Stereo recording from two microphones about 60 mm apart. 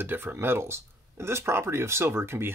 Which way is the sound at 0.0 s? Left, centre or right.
Right.